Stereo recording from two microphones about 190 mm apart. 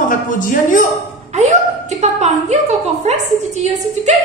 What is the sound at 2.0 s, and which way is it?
Speech, 35° right (ahead or behind).